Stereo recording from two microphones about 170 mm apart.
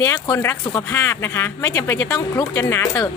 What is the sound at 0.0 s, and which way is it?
Speech, 20° left (ahead or behind).